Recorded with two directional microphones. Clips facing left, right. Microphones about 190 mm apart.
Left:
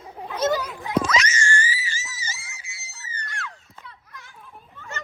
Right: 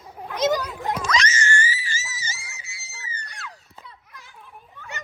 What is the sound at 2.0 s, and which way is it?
Screaming, 25° left (ahead or behind).